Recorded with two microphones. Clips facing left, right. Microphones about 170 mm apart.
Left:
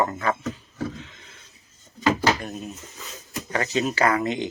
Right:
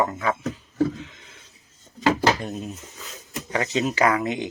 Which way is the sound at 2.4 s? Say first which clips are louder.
Right 2 dB; 25° right (ahead or behind).